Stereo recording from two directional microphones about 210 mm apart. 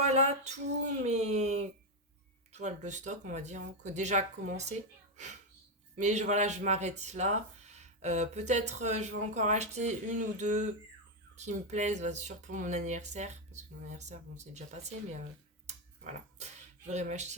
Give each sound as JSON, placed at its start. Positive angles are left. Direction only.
{"t": 0.1, "sound": "speech", "side_deg": -30}
{"t": 6.0, "sound": "speech", "side_deg": -35}
{"t": 16.4, "sound": "a sound", "side_deg": -35}